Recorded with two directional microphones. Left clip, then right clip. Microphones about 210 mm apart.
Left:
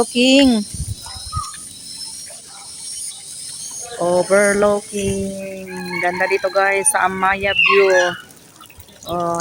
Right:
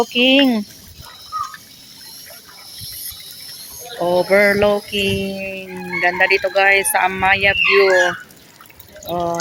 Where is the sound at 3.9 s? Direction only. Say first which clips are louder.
Even; 10° left (ahead or behind).